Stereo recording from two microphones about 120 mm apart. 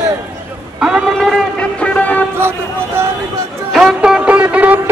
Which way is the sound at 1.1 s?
5° left (ahead or behind).